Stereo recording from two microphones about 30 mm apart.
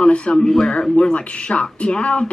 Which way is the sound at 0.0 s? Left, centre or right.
Left.